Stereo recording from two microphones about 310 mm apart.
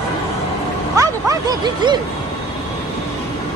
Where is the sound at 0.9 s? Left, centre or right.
Centre.